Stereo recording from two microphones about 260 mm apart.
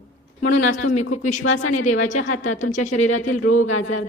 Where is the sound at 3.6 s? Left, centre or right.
Left.